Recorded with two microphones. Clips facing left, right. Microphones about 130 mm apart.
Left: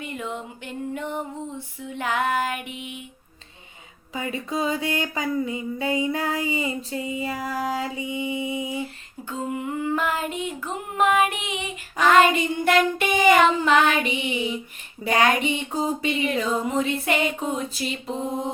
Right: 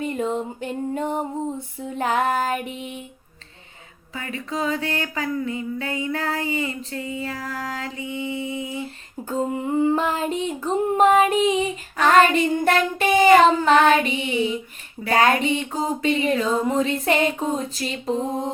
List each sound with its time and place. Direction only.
0.0 s music: 40° right (ahead or behind)
4.1 s a sound: 15° left (ahead or behind)
9.2 s music: 35° right (ahead or behind)